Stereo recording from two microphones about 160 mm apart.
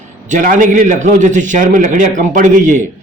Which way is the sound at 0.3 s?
55° right (ahead or behind).